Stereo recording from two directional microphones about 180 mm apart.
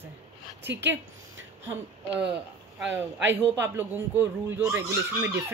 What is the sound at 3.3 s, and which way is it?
Speech, 10° right (ahead or behind).